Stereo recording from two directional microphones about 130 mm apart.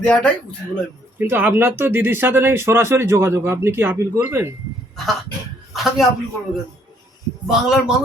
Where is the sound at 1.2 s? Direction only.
15° right (ahead or behind).